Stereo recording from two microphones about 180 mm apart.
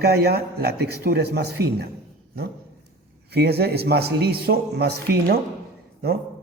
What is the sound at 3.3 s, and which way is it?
A man's voice, 65° right (ahead or behind).